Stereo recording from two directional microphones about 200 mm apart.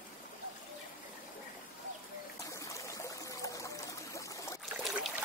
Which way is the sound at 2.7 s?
15° left (ahead or behind).